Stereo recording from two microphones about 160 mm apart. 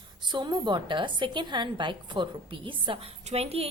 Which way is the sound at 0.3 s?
25° right (ahead or behind).